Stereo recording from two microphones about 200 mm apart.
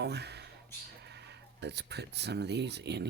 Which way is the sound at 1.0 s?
55° right (ahead or behind).